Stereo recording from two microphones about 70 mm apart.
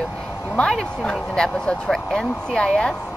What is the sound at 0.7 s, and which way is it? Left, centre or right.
Speech, centre.